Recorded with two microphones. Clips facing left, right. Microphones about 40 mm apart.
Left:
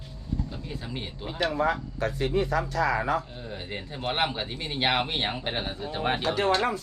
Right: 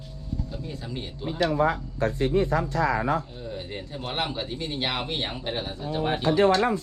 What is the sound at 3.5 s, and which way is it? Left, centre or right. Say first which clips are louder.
Speech: right 1 dB; centre.